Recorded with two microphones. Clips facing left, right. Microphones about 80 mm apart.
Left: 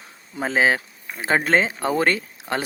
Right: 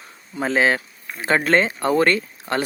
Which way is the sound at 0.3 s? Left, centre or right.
Centre.